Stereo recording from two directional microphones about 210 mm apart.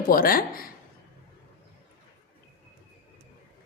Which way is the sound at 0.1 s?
45° left (ahead or behind).